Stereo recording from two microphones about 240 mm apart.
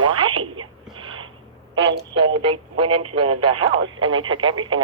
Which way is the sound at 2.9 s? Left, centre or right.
Right.